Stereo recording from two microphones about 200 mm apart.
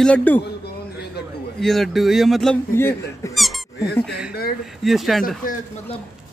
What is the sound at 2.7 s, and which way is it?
Speech, 10° left (ahead or behind).